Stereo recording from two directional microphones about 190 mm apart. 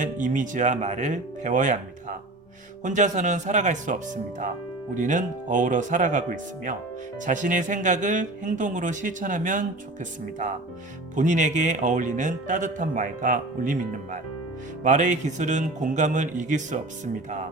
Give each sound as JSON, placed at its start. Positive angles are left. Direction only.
{"t": 0.0, "sound": "speech", "side_deg": -40}